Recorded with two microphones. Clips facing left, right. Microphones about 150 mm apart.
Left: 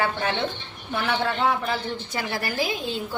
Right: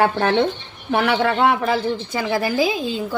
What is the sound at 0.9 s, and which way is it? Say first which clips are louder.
Speech: right 7 dB; 70° right (ahead or behind).